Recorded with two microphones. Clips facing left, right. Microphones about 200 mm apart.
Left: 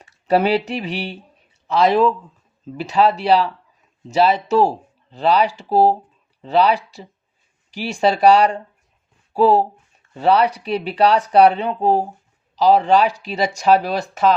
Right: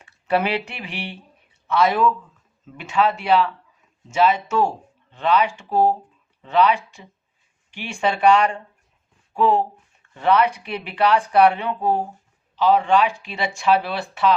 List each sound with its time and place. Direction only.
0.0 s speech: 35° left (ahead or behind)